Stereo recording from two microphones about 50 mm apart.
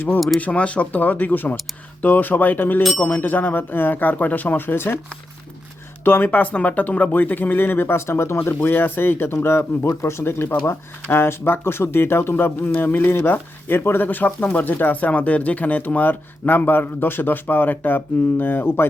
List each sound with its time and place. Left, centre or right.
0.3 s speech: left
6.1 s speech: left
6.4 s speech: left
8.7 s speech: left
9.9 s speech: left